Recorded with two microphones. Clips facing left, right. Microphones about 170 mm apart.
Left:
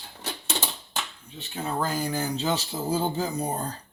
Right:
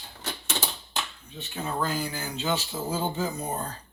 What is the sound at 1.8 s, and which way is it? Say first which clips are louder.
Speech: left 4 dB; 40° left (ahead or behind).